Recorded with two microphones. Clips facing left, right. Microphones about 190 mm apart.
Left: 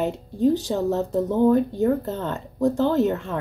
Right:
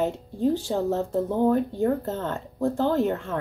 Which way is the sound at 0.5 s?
75° left (ahead or behind).